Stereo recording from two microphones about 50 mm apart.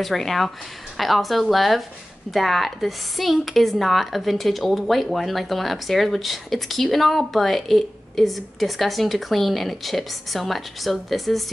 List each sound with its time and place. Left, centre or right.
0.0 s speech: centre